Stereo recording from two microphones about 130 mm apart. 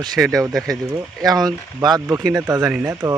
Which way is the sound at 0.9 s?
30° right (ahead or behind).